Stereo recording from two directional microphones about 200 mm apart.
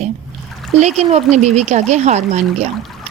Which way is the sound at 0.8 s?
35° right (ahead or behind).